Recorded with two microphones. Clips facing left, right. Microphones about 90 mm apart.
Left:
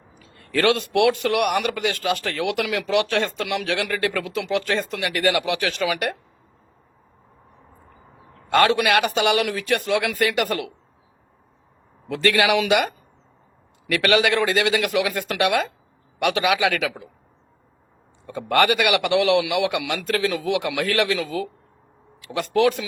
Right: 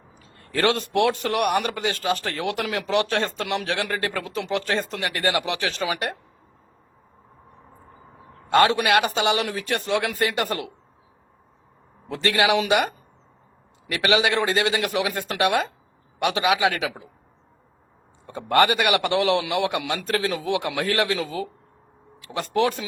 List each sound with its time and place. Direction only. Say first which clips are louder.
0.3 s a man's voice: left 2 dB; 30° right (ahead or behind)
8.4 s a man's voice: even; 25° right (ahead or behind)
12.1 s a man's voice: left 2 dB; 30° right (ahead or behind)
13.8 s a man's voice: left 2 dB; 20° right (ahead or behind)
18.3 s a man's voice: even; 30° right (ahead or behind)